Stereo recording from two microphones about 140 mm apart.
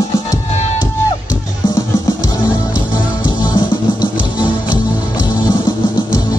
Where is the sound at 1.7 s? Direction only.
25° left (ahead or behind).